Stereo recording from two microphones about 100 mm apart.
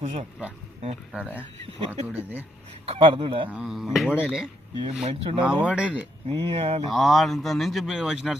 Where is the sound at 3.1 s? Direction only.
60° right (ahead or behind).